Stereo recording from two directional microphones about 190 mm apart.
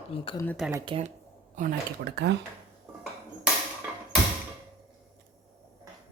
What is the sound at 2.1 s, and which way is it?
Speech, 65° right (ahead or behind).